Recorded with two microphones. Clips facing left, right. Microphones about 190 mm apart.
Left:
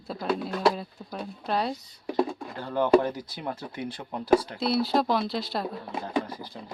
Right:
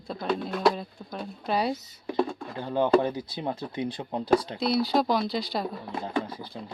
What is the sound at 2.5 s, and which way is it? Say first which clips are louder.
Speech: left 1 dB; 15° right (ahead or behind).